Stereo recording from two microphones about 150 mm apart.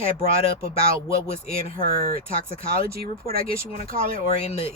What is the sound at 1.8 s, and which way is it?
Speech, 70° right (ahead or behind).